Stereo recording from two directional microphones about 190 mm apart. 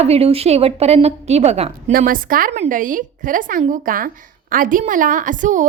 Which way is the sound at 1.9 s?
45° right (ahead or behind).